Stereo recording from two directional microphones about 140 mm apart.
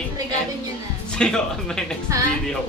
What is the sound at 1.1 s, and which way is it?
Speech, 5° left (ahead or behind).